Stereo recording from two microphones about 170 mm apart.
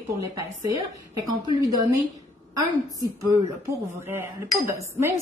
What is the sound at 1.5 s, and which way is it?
Speech, 20° right (ahead or behind).